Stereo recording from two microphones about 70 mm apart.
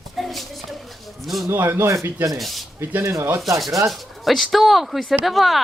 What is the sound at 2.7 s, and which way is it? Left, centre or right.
Speech, right.